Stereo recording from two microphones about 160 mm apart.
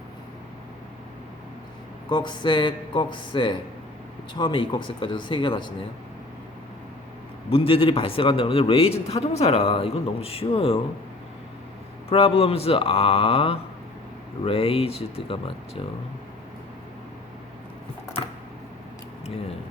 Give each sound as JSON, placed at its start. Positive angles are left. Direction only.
{"t": 2.0, "sound": "speech", "side_deg": 30}
{"t": 7.5, "sound": "a man's voice", "side_deg": 35}
{"t": 12.0, "sound": "a man's voice", "side_deg": 35}